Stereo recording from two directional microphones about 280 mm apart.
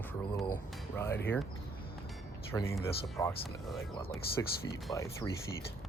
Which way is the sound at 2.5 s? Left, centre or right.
Centre.